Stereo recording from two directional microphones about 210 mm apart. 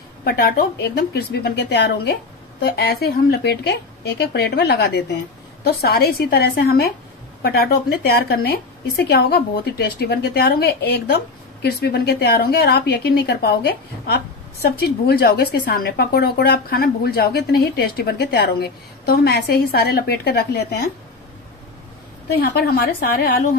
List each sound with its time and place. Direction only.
0.2 s a woman's voice: 45° left (ahead or behind)
22.4 s a woman's voice: 50° left (ahead or behind)